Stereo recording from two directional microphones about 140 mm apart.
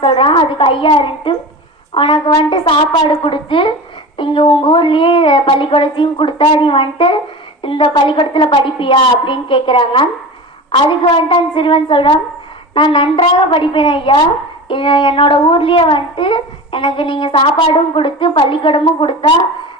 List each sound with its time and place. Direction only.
0.0 s a child's voice: 40° left (ahead or behind)